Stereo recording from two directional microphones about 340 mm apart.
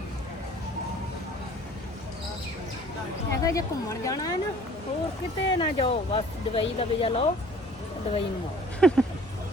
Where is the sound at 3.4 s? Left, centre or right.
Centre.